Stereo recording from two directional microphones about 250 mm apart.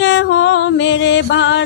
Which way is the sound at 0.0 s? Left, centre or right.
Left.